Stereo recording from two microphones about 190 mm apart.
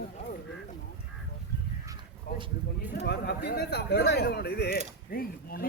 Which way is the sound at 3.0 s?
60° left (ahead or behind).